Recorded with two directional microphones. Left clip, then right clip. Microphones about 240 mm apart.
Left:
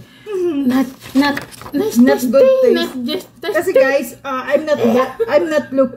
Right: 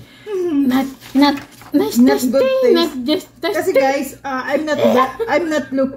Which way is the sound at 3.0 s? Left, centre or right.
Centre.